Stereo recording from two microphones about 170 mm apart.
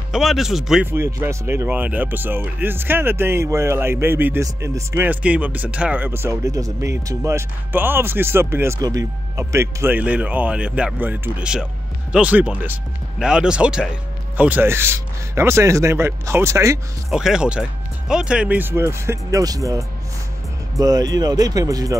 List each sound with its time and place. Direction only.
0.1 s speech: centre (ahead or behind)
0.9 s speech: 15° right (ahead or behind)
17.1 s speech: 5° right (ahead or behind); by 21.9 s 20° right (ahead or behind)